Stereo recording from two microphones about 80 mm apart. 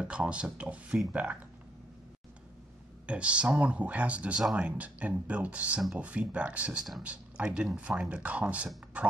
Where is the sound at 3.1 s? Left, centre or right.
Centre.